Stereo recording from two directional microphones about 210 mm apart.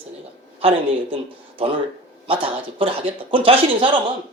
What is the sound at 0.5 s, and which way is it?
Speech, 25° right (ahead or behind).